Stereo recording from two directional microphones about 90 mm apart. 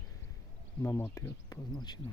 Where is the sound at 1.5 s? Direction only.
50° left (ahead or behind).